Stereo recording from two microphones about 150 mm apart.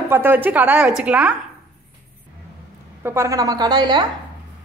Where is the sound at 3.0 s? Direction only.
15° right (ahead or behind).